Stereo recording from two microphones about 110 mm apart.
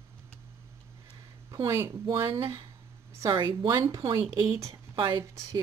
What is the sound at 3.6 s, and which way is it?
Speech, 40° right (ahead or behind).